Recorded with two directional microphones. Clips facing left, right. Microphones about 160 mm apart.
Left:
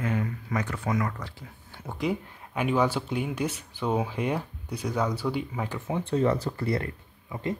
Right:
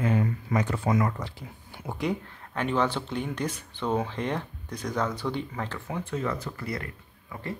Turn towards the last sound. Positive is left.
turn(degrees=20)  # may be behind; listen again after turning